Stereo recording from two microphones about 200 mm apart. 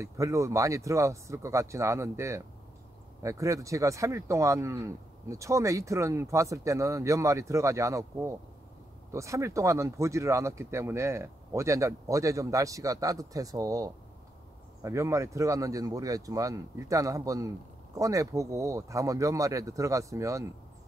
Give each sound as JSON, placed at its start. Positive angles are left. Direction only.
{"t": 0.0, "sound": "speech", "side_deg": -15}